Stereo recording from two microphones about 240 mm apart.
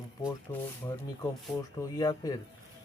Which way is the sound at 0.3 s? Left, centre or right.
Centre.